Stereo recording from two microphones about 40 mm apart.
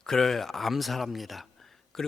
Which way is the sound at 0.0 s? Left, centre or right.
Centre.